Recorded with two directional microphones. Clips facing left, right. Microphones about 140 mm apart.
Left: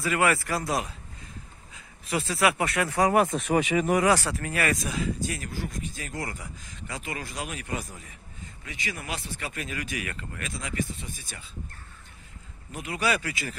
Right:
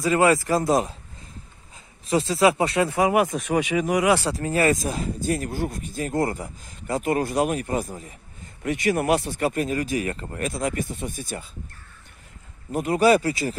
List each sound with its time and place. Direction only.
0.0 s speech: 25° right (ahead or behind)
2.0 s speech: 30° right (ahead or behind)
2.9 s speech: 15° right (ahead or behind)
3.3 s speech: 5° right (ahead or behind)
4.0 s speech: 20° right (ahead or behind)
4.8 s speech: 40° right (ahead or behind)
7.5 s speech: 40° right (ahead or behind)
8.6 s speech: 55° right (ahead or behind)
12.7 s speech: 45° right (ahead or behind)